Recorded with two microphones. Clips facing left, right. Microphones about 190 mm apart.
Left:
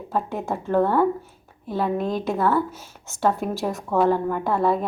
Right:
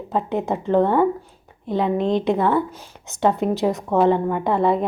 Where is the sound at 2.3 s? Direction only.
20° right (ahead or behind).